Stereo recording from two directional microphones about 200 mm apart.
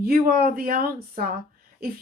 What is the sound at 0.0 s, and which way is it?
Speech, 50° right (ahead or behind).